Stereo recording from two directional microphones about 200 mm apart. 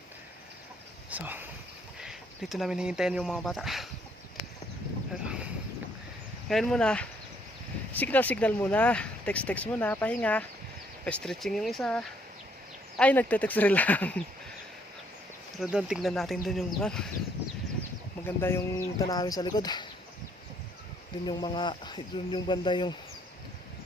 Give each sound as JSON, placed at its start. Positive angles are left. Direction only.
{"t": 1.1, "sound": "speech", "side_deg": -10}
{"t": 5.2, "sound": "a sound", "side_deg": -5}
{"t": 6.5, "sound": "speech", "side_deg": 5}
{"t": 15.7, "sound": "speech", "side_deg": 0}
{"t": 18.3, "sound": "speech", "side_deg": 10}
{"t": 21.2, "sound": "speech", "side_deg": 20}